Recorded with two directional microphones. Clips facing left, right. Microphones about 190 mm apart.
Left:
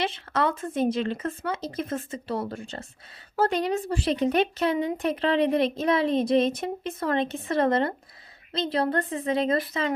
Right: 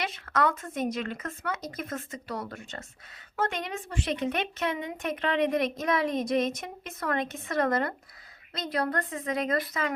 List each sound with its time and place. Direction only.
0.0 s speech: 30° left (ahead or behind)